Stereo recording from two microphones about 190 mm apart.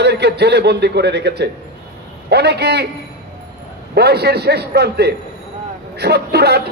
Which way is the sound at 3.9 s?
60° right (ahead or behind).